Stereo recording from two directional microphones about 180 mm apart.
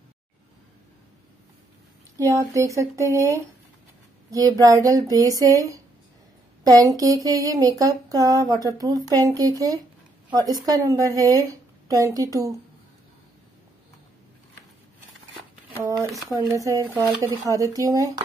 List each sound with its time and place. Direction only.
2.1 s a sound: 15° right (ahead or behind)
4.3 s speech: 20° right (ahead or behind)
16.3 s speech: 15° right (ahead or behind)